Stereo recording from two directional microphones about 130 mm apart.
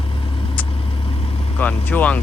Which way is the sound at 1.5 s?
10° left (ahead or behind).